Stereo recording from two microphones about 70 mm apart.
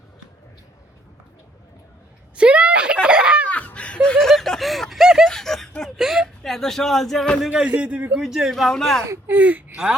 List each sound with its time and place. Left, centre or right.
2.3 s a sound: centre
3.5 s snicker: left; by 5.3 s centre
5.3 s a sound: centre
6.0 s a sound: centre
6.4 s speech: centre
7.4 s speech: centre
7.7 s a man's voice: right
8.2 s speech: centre
9.2 s speech: right